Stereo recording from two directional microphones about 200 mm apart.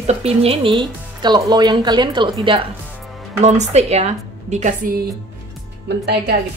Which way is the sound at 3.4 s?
35° right (ahead or behind).